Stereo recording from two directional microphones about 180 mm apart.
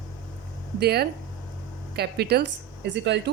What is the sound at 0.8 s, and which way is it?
A woman's voice, 60° right (ahead or behind).